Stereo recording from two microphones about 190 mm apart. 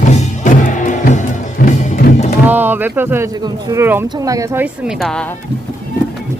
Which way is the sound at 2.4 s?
10° right (ahead or behind).